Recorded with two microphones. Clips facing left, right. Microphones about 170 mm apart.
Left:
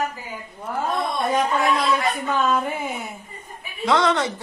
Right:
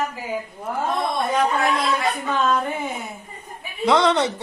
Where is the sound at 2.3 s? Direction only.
10° left (ahead or behind).